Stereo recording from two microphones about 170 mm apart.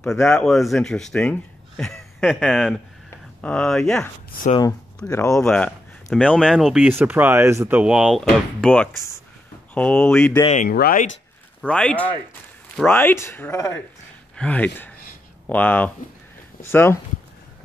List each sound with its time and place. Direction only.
0.0 s speech: 5° left (ahead or behind)
5.0 s speech: 15° left (ahead or behind)
5.4 s speech: 5° left (ahead or behind)
10.5 s speech: 55° left (ahead or behind)
11.6 s speech: 5° left (ahead or behind)